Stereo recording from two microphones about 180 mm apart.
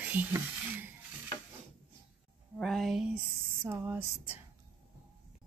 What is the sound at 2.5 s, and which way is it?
Speech, centre (ahead or behind).